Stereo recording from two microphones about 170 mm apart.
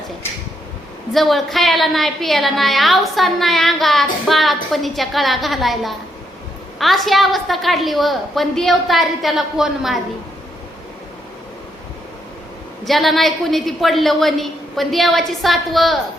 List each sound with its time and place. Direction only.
1.1 s a woman's voice: centre (ahead or behind)
12.8 s a woman's voice: centre (ahead or behind)